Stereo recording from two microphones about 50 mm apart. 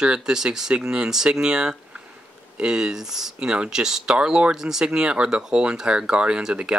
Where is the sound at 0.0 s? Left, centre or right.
Centre.